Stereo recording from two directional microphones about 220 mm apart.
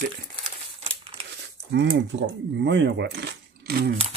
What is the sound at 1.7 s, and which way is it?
Speech, 50° right (ahead or behind).